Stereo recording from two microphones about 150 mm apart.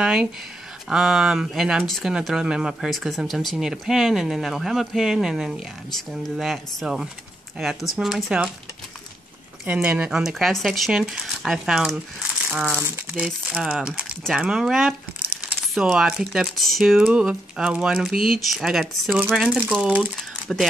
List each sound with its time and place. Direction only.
0.0 s speech: 5° right (ahead or behind)
9.7 s speech: 10° right (ahead or behind)
13.6 s speech: 5° right (ahead or behind)
20.5 s speech: 5° left (ahead or behind)